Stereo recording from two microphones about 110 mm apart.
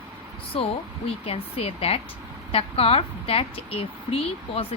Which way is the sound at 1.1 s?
65° left (ahead or behind).